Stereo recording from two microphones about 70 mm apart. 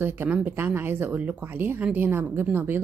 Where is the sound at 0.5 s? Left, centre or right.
Right.